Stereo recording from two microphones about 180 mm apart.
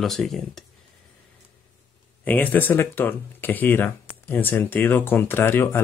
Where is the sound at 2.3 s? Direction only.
10° left (ahead or behind).